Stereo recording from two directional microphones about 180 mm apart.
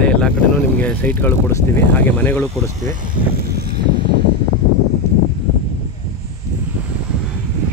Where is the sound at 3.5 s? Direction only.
60° right (ahead or behind).